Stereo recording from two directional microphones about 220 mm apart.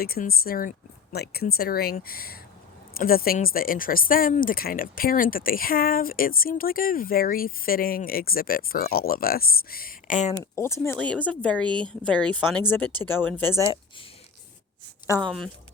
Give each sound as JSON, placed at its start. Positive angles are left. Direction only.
{"t": 0.0, "sound": "speech", "side_deg": 45}
{"t": 10.3, "sound": "speech", "side_deg": 10}
{"t": 15.2, "sound": "speech", "side_deg": 0}